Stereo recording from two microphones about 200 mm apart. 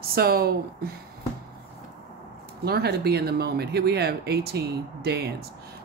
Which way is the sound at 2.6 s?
50° right (ahead or behind).